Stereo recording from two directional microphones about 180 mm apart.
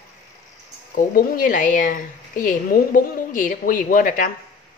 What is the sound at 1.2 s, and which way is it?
A woman's voice, 50° left (ahead or behind).